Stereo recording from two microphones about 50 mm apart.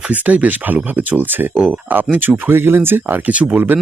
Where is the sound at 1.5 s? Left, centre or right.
Right.